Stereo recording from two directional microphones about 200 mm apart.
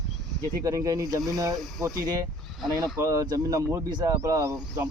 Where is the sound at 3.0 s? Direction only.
15° right (ahead or behind).